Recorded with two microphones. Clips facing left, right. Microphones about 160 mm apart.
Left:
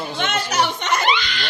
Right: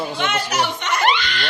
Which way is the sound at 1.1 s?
50° right (ahead or behind).